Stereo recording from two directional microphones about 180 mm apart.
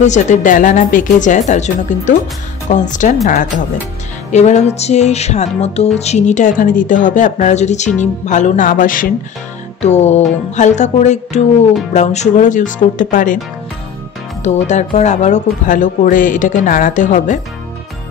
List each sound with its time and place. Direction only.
0.0 s speech: 40° left (ahead or behind)
4.3 s music: 40° left (ahead or behind)
9.8 s music: 40° left (ahead or behind)
11.9 s speech: 40° left (ahead or behind)
14.4 s speech: 40° left (ahead or behind)